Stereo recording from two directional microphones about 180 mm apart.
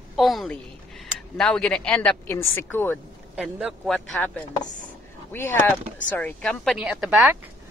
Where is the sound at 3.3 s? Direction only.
5° right (ahead or behind).